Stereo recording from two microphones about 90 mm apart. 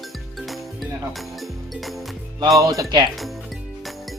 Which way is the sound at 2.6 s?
40° right (ahead or behind).